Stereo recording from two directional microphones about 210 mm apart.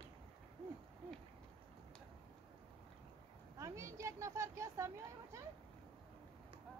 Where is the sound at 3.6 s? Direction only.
15° right (ahead or behind).